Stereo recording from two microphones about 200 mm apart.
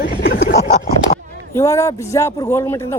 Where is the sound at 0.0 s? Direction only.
50° left (ahead or behind).